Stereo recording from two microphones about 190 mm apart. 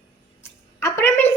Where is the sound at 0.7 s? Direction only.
15° left (ahead or behind).